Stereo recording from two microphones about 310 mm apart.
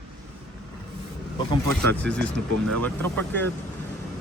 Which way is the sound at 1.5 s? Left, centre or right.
Centre.